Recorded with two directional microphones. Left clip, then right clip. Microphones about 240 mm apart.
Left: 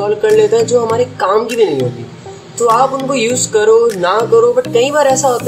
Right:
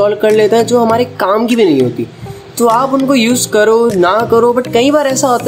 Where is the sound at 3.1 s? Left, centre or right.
Right.